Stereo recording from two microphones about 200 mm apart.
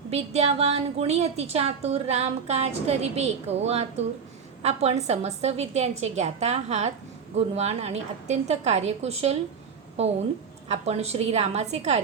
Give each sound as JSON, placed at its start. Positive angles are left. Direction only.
{"t": 0.1, "sound": "a woman's voice", "side_deg": -30}